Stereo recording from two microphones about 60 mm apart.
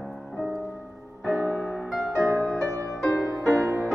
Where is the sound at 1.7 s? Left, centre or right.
Centre.